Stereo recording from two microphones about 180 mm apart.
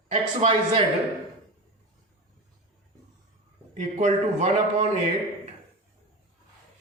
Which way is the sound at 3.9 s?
40° right (ahead or behind).